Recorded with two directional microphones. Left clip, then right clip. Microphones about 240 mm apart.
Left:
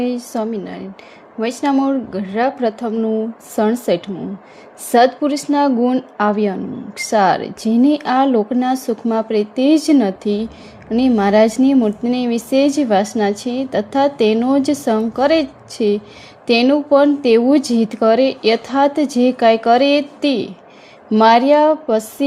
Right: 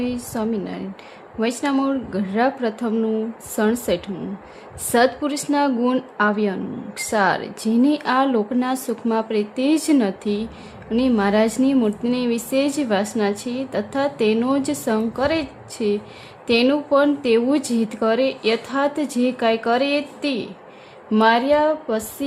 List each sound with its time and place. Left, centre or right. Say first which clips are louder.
0.0 s a woman's voice: left 5 dB; centre